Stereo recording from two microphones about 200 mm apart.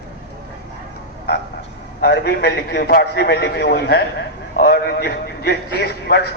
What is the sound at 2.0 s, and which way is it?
A man's voice, 55° left (ahead or behind).